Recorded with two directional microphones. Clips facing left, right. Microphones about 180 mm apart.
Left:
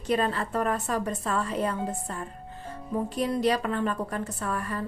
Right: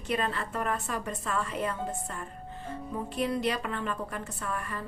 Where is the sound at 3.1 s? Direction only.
40° left (ahead or behind).